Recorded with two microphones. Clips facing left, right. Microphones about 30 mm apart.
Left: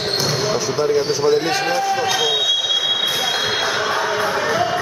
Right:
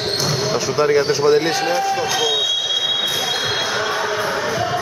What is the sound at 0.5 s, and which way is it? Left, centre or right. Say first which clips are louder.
Speech: right 4 dB; right.